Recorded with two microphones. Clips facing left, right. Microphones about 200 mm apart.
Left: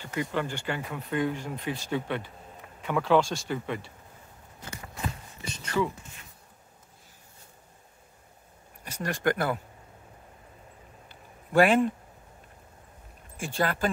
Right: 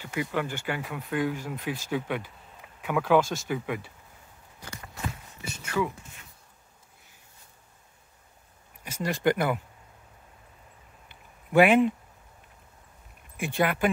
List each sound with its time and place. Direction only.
0.0 s speech: 10° right (ahead or behind)
5.4 s a sound: 10° right (ahead or behind)
9.0 s speech: 10° right (ahead or behind)
11.5 s speech: 10° right (ahead or behind)
13.6 s speech: 20° right (ahead or behind)